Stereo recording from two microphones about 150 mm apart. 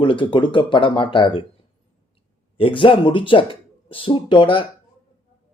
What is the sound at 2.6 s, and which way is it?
Speech, 35° left (ahead or behind).